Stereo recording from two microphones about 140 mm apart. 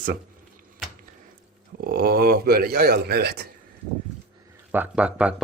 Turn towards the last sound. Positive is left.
turn(degrees=-10)  # may be behind; listen again after turning